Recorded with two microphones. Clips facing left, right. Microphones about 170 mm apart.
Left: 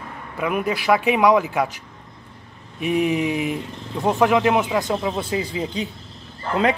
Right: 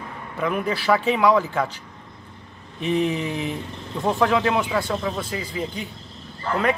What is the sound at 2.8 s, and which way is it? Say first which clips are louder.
Speech: left 2 dB; 10° left (ahead or behind).